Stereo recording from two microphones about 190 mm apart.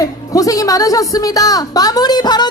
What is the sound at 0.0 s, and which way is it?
A woman's voice, 20° left (ahead or behind).